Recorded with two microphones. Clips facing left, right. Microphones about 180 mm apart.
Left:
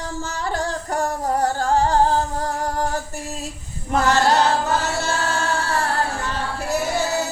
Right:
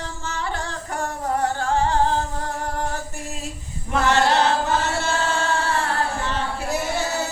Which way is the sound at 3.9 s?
40° left (ahead or behind).